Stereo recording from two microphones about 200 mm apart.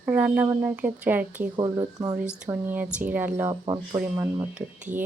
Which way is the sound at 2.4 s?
10° right (ahead or behind).